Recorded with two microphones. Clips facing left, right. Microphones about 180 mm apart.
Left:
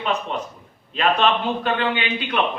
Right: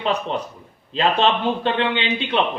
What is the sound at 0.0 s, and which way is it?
A man's voice, 30° right (ahead or behind).